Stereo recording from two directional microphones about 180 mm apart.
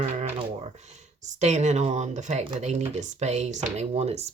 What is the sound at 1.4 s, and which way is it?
Speech, 40° right (ahead or behind).